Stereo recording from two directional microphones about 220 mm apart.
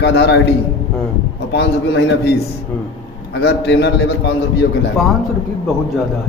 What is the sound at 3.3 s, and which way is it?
A man's voice, 50° left (ahead or behind).